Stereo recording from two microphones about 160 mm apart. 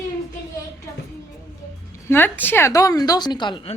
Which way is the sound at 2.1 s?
10° left (ahead or behind).